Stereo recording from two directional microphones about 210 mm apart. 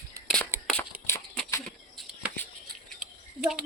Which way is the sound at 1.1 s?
10° left (ahead or behind).